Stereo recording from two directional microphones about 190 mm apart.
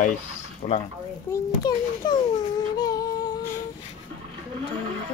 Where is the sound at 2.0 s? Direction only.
20° left (ahead or behind).